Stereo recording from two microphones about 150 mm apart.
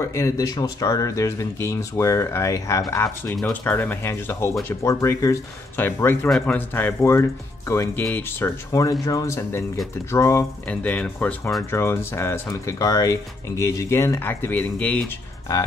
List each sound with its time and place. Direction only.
0.0 s speech: 20° left (ahead or behind)